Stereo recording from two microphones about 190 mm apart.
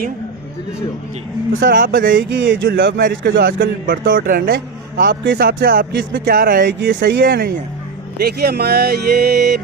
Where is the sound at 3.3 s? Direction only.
60° right (ahead or behind).